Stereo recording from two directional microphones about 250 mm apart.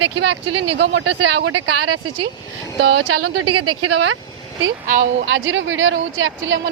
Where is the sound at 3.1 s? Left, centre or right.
Right.